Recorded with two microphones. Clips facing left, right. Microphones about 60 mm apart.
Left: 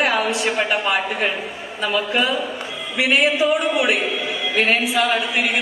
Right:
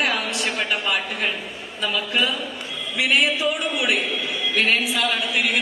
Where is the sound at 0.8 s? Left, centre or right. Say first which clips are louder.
Left 4 dB; centre.